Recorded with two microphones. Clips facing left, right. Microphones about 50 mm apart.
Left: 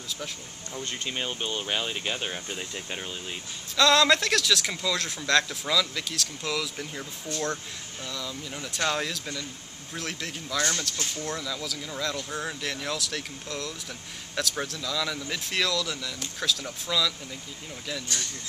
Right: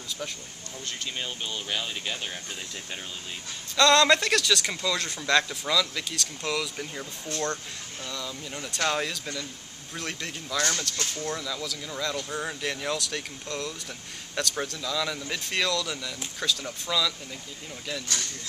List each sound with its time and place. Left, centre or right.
0.7 s speech: left
3.7 s speech: centre